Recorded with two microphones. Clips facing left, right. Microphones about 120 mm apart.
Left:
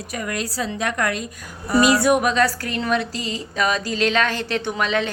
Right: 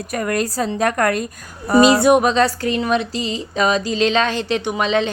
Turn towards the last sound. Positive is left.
turn(degrees=-20)  # may be behind; listen again after turning